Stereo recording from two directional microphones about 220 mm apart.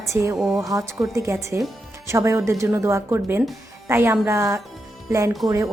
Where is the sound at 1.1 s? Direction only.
15° right (ahead or behind).